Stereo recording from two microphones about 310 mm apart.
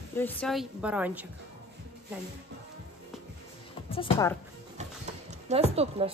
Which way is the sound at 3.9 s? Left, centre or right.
Centre.